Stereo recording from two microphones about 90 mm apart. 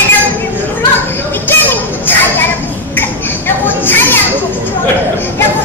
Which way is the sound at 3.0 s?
25° left (ahead or behind).